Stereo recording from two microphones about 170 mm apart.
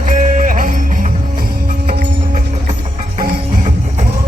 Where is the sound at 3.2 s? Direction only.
45° right (ahead or behind).